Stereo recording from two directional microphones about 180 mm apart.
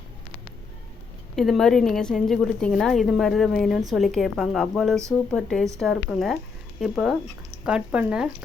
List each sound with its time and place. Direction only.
1.4 s a woman's voice: centre (ahead or behind)